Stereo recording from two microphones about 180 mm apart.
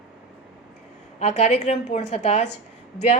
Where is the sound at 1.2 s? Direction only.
40° left (ahead or behind).